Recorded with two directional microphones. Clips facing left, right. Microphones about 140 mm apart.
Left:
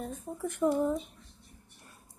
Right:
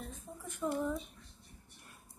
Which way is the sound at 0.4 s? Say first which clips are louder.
Left 8 dB; 70° left (ahead or behind).